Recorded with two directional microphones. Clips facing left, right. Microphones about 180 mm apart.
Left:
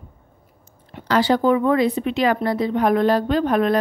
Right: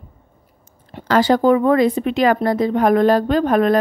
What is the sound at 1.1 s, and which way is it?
A woman's voice, 45° right (ahead or behind).